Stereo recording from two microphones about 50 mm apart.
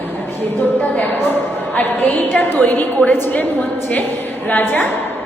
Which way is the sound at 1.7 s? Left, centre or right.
Left.